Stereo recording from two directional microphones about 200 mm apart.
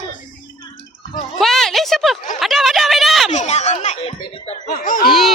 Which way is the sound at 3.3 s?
35° left (ahead or behind).